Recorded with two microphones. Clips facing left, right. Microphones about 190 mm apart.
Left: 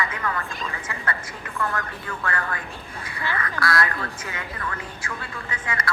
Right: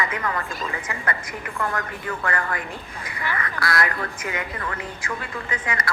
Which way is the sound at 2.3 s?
20° right (ahead or behind).